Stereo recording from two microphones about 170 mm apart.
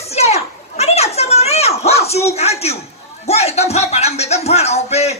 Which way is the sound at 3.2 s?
40° left (ahead or behind).